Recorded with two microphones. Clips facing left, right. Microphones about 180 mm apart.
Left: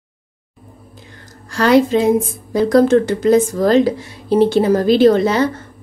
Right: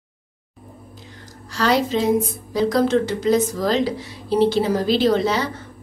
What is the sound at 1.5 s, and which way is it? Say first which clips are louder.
Speech: left 7 dB; 55° left (ahead or behind).